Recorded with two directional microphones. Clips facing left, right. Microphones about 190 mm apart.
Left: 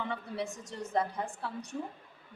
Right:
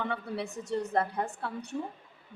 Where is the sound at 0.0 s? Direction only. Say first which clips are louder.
Right 2 dB; 60° right (ahead or behind).